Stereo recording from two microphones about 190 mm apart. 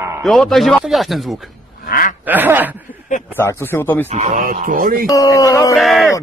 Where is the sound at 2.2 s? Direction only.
10° right (ahead or behind).